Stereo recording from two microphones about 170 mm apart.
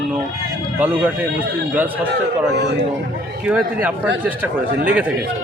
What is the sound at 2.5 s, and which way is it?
Speech, 85° right.